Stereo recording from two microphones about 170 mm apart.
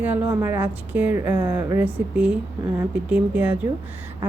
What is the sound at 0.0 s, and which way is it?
Speech, 10° right (ahead or behind).